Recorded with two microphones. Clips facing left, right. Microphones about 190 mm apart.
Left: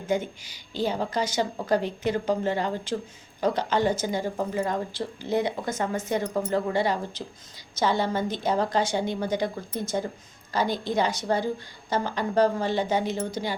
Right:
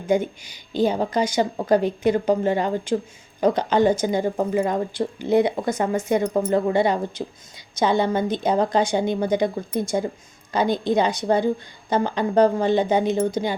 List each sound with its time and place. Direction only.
0.1 s a woman's voice: 15° right (ahead or behind)